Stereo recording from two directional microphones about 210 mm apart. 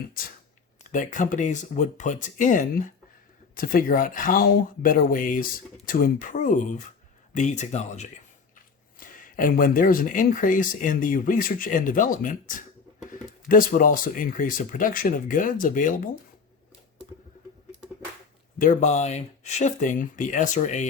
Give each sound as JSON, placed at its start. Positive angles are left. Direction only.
{"t": 0.9, "sound": "speech", "side_deg": 35}
{"t": 18.6, "sound": "speech", "side_deg": 35}